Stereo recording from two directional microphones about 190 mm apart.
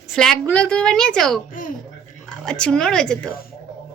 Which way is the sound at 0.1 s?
Centre (ahead or behind).